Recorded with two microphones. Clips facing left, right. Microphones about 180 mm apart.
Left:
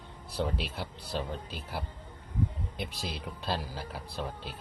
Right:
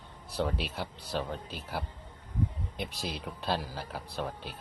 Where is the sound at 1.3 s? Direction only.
50° right (ahead or behind).